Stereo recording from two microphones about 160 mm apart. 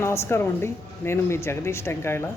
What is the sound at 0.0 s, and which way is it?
Speech, 15° left (ahead or behind).